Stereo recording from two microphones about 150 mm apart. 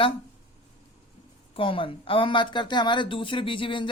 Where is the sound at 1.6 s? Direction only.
35° left (ahead or behind).